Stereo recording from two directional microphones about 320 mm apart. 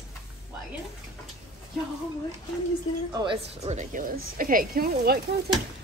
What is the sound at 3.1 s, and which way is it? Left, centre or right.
A woman's voice, centre.